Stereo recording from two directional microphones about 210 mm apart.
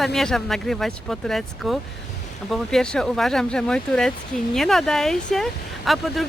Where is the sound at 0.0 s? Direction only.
Centre (ahead or behind).